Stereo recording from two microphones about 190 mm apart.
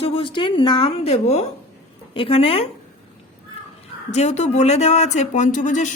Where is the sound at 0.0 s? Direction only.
30° left (ahead or behind).